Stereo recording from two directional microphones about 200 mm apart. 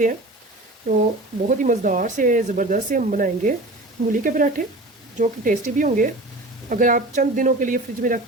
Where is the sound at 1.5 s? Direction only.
40° right (ahead or behind).